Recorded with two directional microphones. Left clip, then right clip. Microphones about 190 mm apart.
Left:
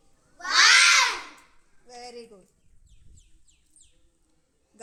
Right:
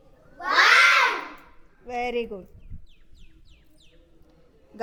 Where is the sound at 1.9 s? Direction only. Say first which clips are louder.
Right 15 dB; 80° right.